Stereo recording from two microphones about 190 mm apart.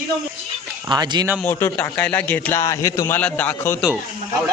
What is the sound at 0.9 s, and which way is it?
Speech, 25° right (ahead or behind).